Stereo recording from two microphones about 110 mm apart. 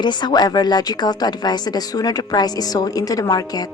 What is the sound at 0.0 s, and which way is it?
A woman's voice, 40° left (ahead or behind).